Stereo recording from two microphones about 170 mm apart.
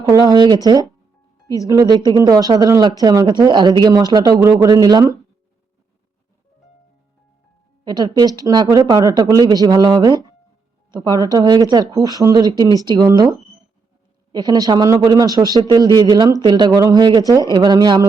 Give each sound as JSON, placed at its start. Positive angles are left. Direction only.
{"t": 0.0, "sound": "speech", "side_deg": -20}
{"t": 7.9, "sound": "speech", "side_deg": -25}